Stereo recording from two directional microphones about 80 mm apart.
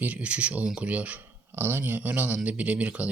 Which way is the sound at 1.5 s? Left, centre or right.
Right.